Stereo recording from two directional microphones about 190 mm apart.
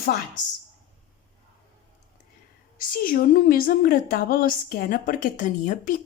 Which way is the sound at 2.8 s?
50° left (ahead or behind).